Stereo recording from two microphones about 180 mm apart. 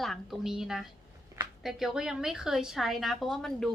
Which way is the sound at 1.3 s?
20° right (ahead or behind).